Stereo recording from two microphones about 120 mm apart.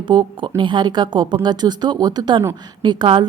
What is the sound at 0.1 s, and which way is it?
Speech, 40° right (ahead or behind).